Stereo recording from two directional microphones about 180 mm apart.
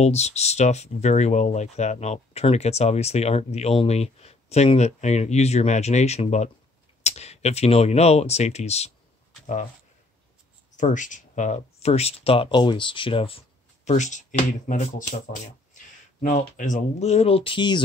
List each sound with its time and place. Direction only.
0.0 s speech: 35° left (ahead or behind)
10.8 s speech: 45° left (ahead or behind)
13.8 s speech: 40° left (ahead or behind); by 17.8 s 25° left (ahead or behind)